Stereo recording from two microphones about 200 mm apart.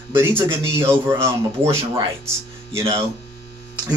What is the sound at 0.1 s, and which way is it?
Speech, 10° right (ahead or behind).